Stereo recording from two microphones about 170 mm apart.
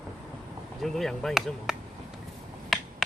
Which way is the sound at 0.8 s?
Centre (ahead or behind).